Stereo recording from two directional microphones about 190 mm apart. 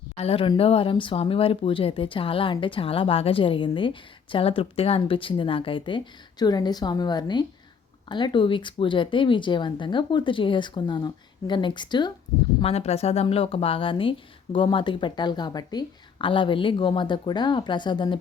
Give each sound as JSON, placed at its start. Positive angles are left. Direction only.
{"t": 0.2, "sound": "speech", "side_deg": 30}